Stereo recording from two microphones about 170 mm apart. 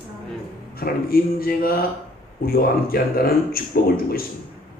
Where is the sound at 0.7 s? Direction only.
60° left (ahead or behind).